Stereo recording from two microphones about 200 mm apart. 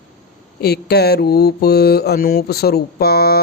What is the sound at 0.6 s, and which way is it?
Mantra, 55° left (ahead or behind).